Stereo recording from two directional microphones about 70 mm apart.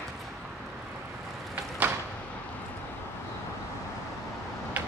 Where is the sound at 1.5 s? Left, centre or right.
Right.